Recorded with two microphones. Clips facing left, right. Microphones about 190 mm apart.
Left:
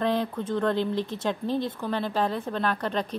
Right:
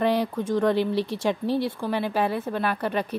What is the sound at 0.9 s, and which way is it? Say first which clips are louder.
Speech: right 3 dB; 20° left (ahead or behind).